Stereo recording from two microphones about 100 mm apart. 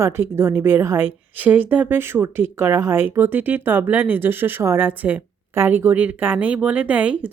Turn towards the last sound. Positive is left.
turn(degrees=-15)  # may be behind; listen again after turning